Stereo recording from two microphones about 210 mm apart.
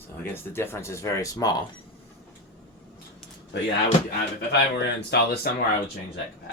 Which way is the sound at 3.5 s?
55° left (ahead or behind).